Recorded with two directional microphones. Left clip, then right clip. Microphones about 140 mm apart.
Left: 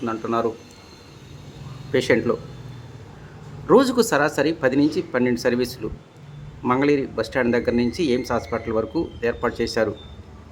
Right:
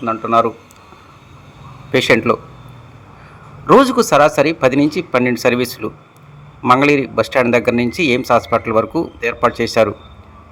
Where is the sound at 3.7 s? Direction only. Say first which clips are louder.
Right 7 dB; 25° right (ahead or behind).